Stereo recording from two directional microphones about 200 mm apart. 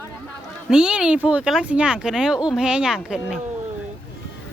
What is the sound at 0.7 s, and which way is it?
Speech, 5° right (ahead or behind).